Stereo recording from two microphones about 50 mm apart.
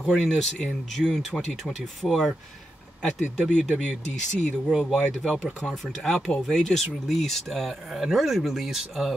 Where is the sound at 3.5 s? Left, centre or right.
Centre.